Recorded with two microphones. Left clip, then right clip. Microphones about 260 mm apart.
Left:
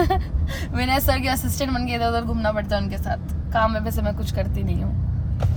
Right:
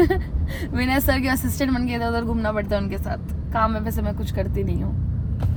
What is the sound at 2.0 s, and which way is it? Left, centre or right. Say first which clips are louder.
Speech: left 2 dB; left.